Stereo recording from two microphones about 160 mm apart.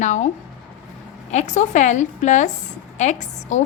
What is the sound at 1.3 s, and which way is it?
A woman's voice, 45° left (ahead or behind).